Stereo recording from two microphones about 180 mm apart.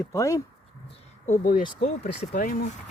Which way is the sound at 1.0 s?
45° left (ahead or behind).